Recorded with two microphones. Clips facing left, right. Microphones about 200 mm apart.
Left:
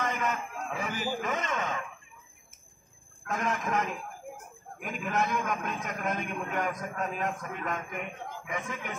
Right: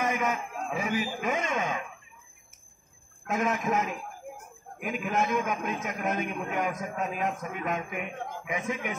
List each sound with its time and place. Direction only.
0.0 s a man's voice: 10° right (ahead or behind)
3.3 s a man's voice: 10° right (ahead or behind)